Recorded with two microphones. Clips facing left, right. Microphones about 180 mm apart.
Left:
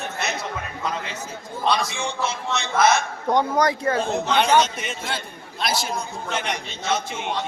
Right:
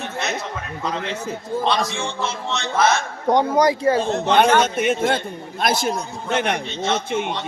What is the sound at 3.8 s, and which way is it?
Speech, 30° right (ahead or behind).